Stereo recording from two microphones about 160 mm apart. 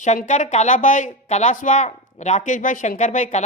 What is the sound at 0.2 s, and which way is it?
Speech, 50° left (ahead or behind).